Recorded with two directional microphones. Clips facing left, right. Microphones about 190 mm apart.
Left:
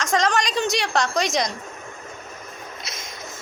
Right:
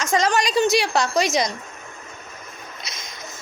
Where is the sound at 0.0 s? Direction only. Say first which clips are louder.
Right 1 dB; 5° right (ahead or behind).